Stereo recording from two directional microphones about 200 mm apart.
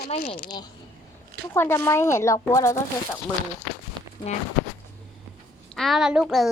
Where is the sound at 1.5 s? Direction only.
10° left (ahead or behind).